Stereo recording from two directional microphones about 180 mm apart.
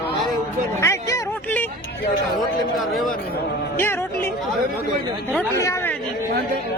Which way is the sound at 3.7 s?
10° left (ahead or behind).